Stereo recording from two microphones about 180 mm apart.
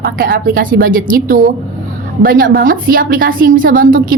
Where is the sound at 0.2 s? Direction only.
55° right (ahead or behind).